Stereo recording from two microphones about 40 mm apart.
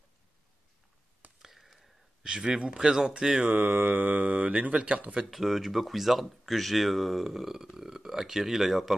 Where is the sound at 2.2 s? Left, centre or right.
Right.